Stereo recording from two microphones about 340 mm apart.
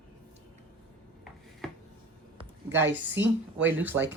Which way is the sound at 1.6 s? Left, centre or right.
Centre.